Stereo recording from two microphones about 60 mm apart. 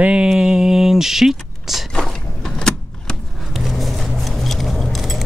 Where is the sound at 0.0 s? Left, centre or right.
Centre.